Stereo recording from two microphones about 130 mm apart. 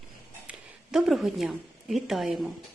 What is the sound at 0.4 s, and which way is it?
A woman's voice, 5° right (ahead or behind).